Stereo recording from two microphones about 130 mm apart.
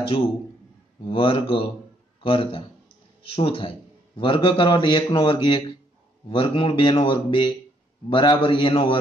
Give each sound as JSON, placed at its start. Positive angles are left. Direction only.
{"t": 1.0, "sound": "speech", "side_deg": 45}